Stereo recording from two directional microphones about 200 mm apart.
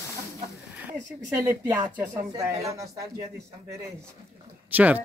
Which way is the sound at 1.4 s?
15° right (ahead or behind).